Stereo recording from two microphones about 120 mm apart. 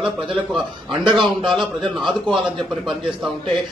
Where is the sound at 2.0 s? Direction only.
40° right (ahead or behind).